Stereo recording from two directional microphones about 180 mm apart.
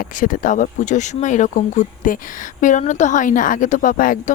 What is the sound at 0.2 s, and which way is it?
A woman's voice, 45° left (ahead or behind).